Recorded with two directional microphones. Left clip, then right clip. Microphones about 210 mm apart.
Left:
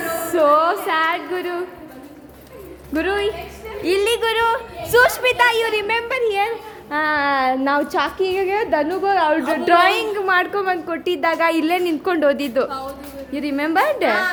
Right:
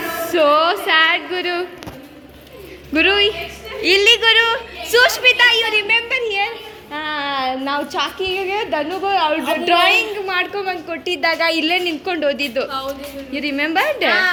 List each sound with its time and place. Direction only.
0.2 s speech: centre (ahead or behind)
2.9 s a woman's voice: centre (ahead or behind)
3.8 s a woman's voice: 10° left (ahead or behind)